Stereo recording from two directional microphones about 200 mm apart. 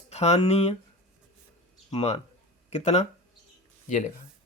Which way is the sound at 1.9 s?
30° left (ahead or behind).